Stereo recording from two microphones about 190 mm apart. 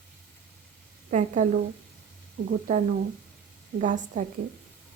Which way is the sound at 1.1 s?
40° right (ahead or behind).